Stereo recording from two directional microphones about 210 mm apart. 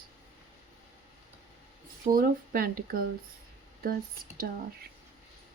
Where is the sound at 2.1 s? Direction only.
45° right (ahead or behind).